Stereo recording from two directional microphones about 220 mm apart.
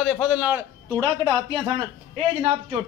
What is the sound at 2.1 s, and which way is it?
Speech, 30° right (ahead or behind).